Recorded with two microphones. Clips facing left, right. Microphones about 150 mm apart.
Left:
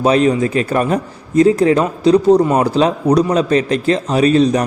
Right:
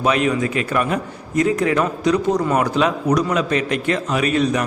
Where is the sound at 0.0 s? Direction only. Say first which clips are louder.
Left 5 dB; 35° left (ahead or behind).